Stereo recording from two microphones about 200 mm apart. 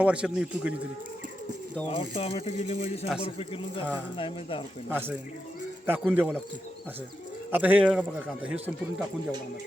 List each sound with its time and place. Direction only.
0.0 s a man's voice: 5° right (ahead or behind)
1.9 s speech: 30° left (ahead or behind)
4.9 s a man's voice: 10° right (ahead or behind)
7.5 s a man's voice: 10° right (ahead or behind)